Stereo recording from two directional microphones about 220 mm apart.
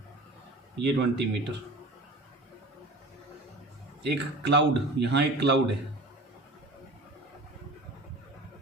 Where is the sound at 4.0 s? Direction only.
50° right (ahead or behind).